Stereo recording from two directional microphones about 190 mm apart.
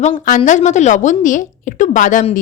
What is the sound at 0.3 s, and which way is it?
A woman's voice, 40° left (ahead or behind).